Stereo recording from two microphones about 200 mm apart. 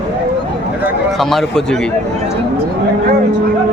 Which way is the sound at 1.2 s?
Centre (ahead or behind).